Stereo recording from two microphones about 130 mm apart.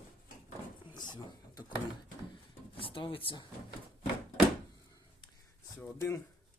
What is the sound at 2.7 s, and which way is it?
Speech, 45° left (ahead or behind).